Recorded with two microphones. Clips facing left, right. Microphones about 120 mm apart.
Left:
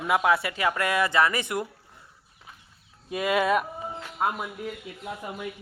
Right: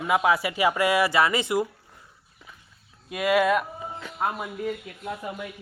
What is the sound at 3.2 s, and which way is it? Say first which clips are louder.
Speech: right 2 dB; 5° right (ahead or behind).